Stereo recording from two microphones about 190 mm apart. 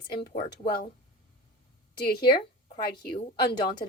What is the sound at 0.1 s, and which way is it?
Speech, 55° left (ahead or behind).